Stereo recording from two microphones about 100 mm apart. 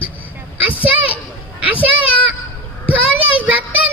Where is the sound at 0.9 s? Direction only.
15° right (ahead or behind).